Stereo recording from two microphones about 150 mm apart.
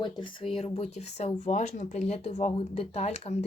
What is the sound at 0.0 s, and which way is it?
Speech, 35° left (ahead or behind).